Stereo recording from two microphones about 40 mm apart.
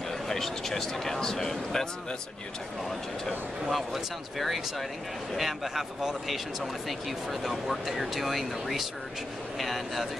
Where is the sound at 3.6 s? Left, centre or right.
Centre.